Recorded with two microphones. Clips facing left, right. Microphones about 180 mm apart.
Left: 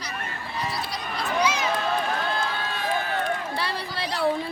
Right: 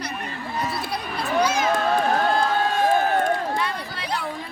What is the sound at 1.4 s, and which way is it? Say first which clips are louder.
Run: right 4 dB; 50° right (ahead or behind).